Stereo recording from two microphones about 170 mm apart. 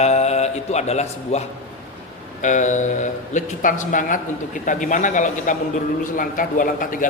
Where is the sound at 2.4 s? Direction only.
45° left (ahead or behind).